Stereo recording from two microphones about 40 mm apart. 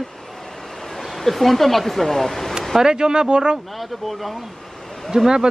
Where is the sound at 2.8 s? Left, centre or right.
Centre.